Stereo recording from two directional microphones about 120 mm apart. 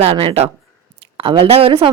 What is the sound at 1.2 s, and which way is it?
Speech, 45° right (ahead or behind).